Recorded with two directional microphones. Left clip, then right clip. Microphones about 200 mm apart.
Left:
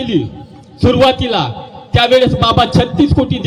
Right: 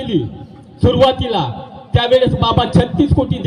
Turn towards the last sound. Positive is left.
turn(degrees=20)  # may be behind; listen again after turning